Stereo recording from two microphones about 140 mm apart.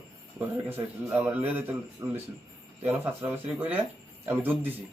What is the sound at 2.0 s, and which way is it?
A man's voice, 20° right (ahead or behind).